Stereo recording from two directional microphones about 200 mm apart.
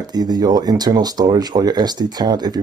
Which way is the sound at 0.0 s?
20° right (ahead or behind).